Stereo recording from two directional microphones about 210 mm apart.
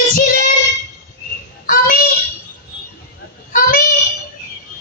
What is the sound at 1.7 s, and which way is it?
Child singing, 45° left (ahead or behind).